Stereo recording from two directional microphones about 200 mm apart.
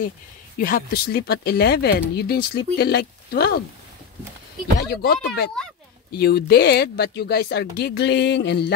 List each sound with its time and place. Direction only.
0.6 s speech: 45° left (ahead or behind)
4.7 s speech: 50° left (ahead or behind)